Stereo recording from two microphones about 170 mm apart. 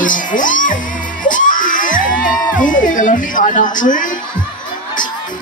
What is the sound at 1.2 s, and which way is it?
Crowd, 50° left (ahead or behind).